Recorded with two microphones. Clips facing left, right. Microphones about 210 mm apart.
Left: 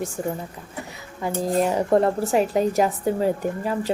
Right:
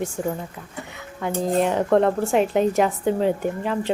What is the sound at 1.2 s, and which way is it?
Speech, 5° left (ahead or behind).